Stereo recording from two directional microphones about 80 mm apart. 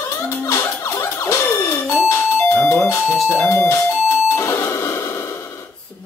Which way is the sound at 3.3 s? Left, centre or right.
Left.